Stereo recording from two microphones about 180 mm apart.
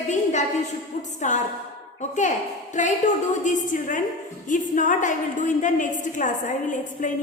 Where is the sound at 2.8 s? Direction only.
45° left (ahead or behind).